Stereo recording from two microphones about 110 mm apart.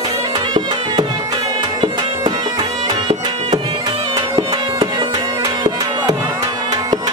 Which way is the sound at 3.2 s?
40° right (ahead or behind).